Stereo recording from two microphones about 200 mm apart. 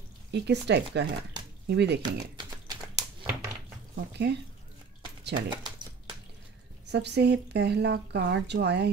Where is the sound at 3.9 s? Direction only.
55° right (ahead or behind).